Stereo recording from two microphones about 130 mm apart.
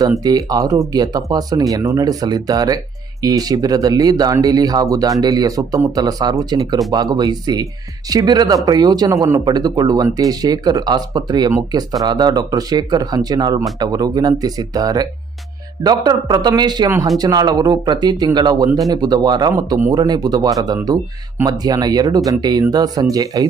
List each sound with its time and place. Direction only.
0.0 s speech: 30° right (ahead or behind)